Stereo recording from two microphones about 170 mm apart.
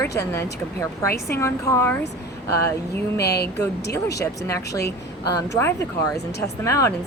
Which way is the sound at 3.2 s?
70° left (ahead or behind).